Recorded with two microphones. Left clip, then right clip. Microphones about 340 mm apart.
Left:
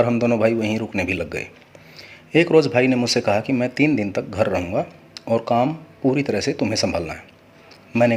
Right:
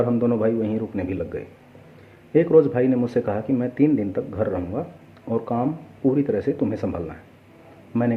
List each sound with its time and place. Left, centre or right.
0.0 s a man's voice: left